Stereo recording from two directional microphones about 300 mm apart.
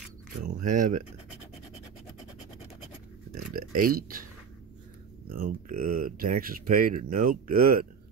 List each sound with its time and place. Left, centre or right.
0.6 s speech: right
3.5 s speech: right
5.3 s speech: right
5.8 s speech: right
6.0 s speech: right